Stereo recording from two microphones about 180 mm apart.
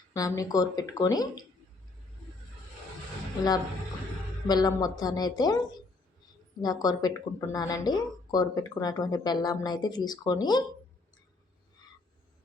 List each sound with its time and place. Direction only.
0.1 s speech: 20° left (ahead or behind)
4.4 s speech: 20° left (ahead or behind)